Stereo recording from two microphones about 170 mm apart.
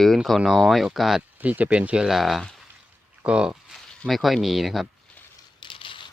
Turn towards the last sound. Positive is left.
turn(degrees=30)  # may be behind; listen again after turning